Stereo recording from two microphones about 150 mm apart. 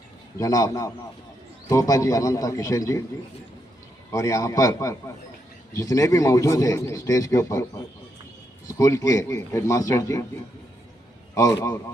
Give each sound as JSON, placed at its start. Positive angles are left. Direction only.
{"t": 0.3, "sound": "speech", "side_deg": 25}
{"t": 4.1, "sound": "speech", "side_deg": 20}
{"t": 8.6, "sound": "speech", "side_deg": 25}
{"t": 11.3, "sound": "speech", "side_deg": 20}